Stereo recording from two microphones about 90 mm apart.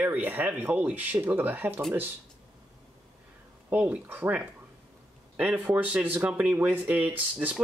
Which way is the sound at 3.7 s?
15° right (ahead or behind).